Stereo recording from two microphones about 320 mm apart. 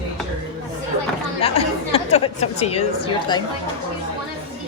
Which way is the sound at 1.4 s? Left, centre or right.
Centre.